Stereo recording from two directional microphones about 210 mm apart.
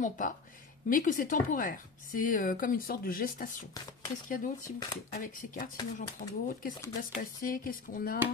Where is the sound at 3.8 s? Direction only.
20° left (ahead or behind).